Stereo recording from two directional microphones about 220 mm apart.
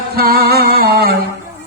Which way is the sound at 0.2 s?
45° right (ahead or behind).